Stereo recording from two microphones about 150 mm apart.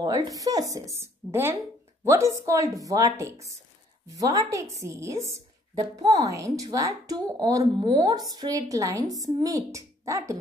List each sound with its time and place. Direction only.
0.0 s a woman's voice: 25° right (ahead or behind)